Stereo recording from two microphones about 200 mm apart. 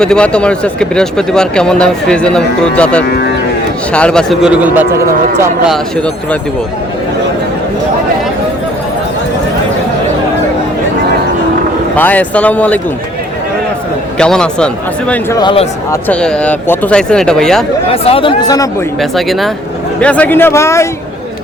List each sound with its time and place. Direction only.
0.0 s speech: 5° left (ahead or behind)
4.9 s speech: 50° right (ahead or behind)
11.9 s speech: 10° left (ahead or behind)
14.2 s speech: 5° left (ahead or behind)
15.1 s speech: 15° left (ahead or behind)
16.0 s speech: 5° left (ahead or behind)
17.8 s speech: 30° left (ahead or behind)
19.1 s speech: centre (ahead or behind)